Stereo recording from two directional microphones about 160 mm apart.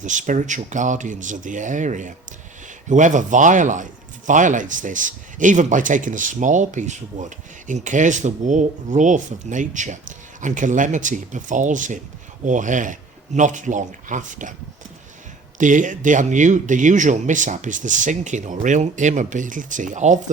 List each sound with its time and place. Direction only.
0.0 s speech: 50° right (ahead or behind)
15.5 s speech: 55° right (ahead or behind)